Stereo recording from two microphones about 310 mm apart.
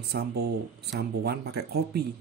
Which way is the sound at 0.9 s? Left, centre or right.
Right.